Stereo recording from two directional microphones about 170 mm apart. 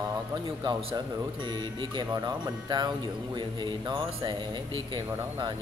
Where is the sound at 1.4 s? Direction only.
25° right (ahead or behind).